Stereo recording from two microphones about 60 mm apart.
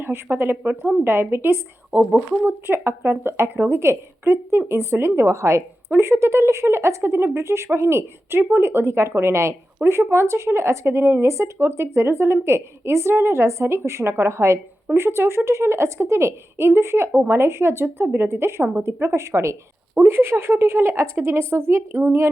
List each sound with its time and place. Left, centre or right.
0.0 s speech: right
2.0 s speech: centre
2.4 s speech: right